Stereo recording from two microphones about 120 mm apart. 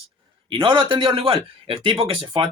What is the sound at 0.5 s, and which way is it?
Speech, 45° right (ahead or behind).